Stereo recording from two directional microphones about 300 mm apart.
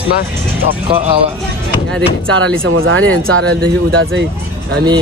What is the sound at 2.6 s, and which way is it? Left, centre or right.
Speech, right.